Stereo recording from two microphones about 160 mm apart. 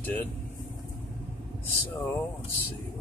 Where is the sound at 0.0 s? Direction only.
10° left (ahead or behind).